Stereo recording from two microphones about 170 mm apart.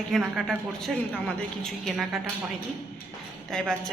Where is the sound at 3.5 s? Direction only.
Centre (ahead or behind).